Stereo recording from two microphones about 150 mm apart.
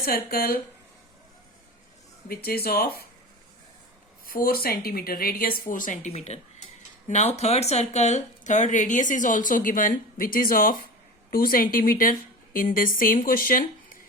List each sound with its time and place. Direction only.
0.0 s speech: 80° left
2.2 s speech: 90° left
4.3 s speech: 75° left (ahead or behind)